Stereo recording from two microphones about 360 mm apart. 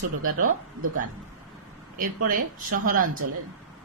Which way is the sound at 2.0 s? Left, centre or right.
Right.